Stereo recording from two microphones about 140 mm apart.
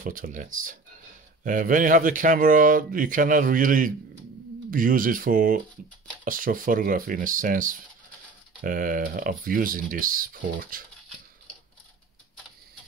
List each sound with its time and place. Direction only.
0.0 s speech: 75° right (ahead or behind)